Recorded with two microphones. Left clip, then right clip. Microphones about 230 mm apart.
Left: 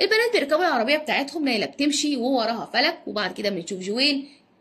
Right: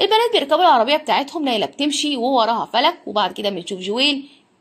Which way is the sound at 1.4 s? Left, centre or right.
Right.